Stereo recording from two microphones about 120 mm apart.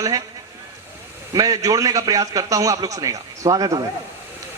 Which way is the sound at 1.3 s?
30° right (ahead or behind).